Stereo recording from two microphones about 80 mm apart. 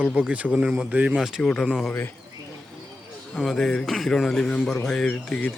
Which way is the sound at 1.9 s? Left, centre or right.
Left.